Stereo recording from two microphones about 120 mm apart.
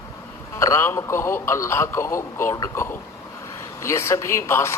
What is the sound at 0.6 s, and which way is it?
A man's voice, 25° left (ahead or behind).